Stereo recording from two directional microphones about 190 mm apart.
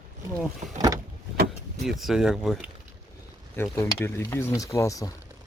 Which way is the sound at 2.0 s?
Centre (ahead or behind).